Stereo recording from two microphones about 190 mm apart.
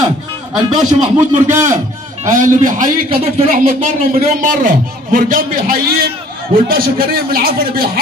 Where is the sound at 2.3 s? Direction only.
40° right (ahead or behind).